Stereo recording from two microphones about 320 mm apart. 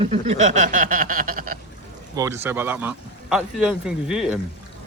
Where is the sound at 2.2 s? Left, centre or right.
Centre.